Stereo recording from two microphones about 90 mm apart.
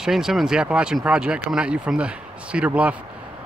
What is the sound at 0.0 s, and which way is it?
Speech, 5° right (ahead or behind).